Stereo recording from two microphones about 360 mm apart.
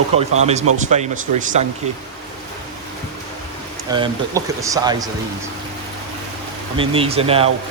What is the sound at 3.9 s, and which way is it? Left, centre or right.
Speech, centre.